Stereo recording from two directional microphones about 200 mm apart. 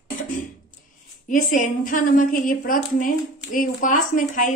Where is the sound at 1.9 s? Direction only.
40° left (ahead or behind).